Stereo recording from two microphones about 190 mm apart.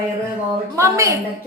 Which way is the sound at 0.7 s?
15° right (ahead or behind).